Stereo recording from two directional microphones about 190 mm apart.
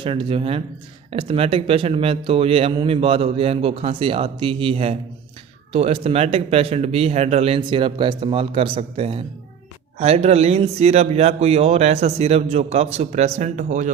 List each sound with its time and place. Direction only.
0.0 s a man's voice: 30° right (ahead or behind)